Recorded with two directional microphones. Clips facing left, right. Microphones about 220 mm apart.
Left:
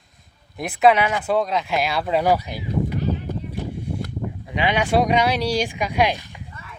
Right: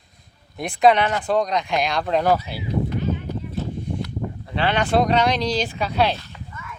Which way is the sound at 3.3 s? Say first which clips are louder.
Even; 50° left (ahead or behind).